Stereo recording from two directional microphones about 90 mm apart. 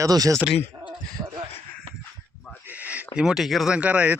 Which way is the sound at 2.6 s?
15° right (ahead or behind).